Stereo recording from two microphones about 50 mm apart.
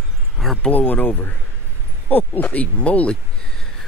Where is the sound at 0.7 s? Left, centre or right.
Left.